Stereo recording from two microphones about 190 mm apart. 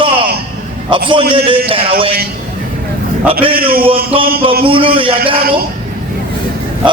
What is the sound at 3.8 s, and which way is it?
A man's voice, 30° right (ahead or behind).